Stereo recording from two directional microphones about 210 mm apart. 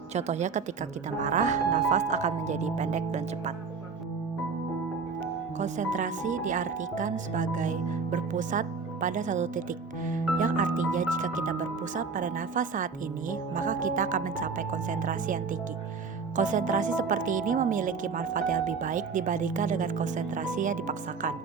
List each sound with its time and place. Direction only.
0.1 s speech: 30° right (ahead or behind)
5.5 s speech: 35° right (ahead or behind)